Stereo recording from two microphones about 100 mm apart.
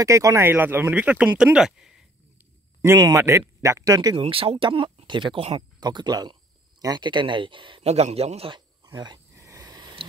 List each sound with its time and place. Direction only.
0.0 s speech: 30° right (ahead or behind); by 2.0 s 5° right (ahead or behind)
2.8 s speech: 30° right (ahead or behind)
4.2 s speech: 65° right (ahead or behind)
7.8 s a man's voice: 90° right
8.5 s cricket: 50° right (ahead or behind)
9.3 s a sound: 30° right (ahead or behind)